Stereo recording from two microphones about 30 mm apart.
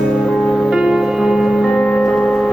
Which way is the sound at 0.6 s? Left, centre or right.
Centre.